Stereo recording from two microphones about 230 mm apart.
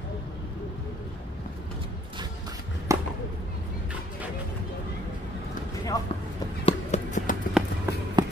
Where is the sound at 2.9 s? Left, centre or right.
Centre.